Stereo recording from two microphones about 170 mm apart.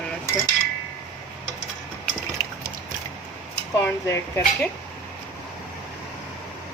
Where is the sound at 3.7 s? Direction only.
15° left (ahead or behind).